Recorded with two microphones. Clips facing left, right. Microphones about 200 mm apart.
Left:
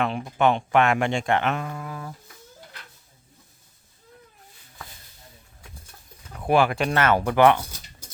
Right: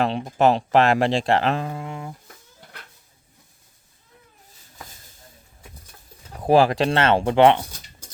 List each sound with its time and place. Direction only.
0.0 s speech: 30° right (ahead or behind)
6.4 s speech: 35° right (ahead or behind)